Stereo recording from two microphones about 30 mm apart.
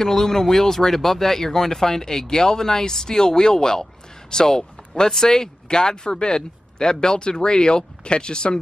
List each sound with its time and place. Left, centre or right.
0.0 s speech: centre; by 8.5 s left